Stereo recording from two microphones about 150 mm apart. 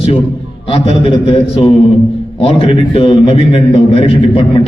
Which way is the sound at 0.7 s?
35° left (ahead or behind).